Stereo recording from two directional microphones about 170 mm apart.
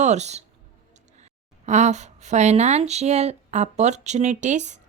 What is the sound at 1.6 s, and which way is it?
A woman's voice, 45° right (ahead or behind).